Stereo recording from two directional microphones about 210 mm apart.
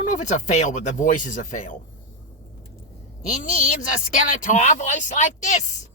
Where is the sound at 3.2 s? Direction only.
40° left (ahead or behind).